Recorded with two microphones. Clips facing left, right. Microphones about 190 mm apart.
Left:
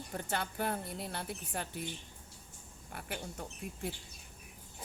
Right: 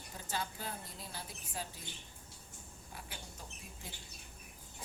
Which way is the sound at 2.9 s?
65° left (ahead or behind).